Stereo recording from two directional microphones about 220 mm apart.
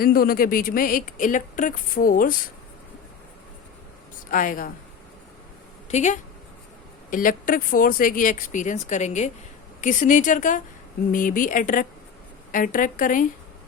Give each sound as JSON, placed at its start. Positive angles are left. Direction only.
{"t": 0.0, "sound": "speech", "side_deg": 40}
{"t": 4.3, "sound": "speech", "side_deg": 35}
{"t": 5.9, "sound": "speech", "side_deg": 30}